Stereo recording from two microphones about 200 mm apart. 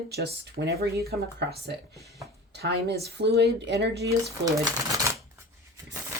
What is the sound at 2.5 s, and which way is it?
Speech, 55° right (ahead or behind).